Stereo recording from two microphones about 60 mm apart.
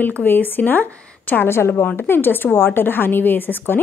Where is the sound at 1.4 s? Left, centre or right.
Left.